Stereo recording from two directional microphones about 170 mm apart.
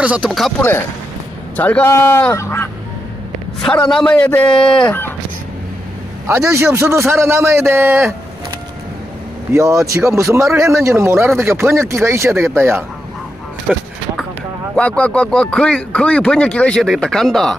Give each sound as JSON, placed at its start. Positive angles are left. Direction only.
{"t": 0.0, "sound": "speech", "side_deg": -5}
{"t": 0.6, "sound": "speech", "side_deg": 15}
{"t": 3.9, "sound": "speech", "side_deg": 5}
{"t": 6.2, "sound": "speech", "side_deg": -15}
{"t": 9.5, "sound": "speech", "side_deg": -15}
{"t": 13.7, "sound": "speech", "side_deg": 0}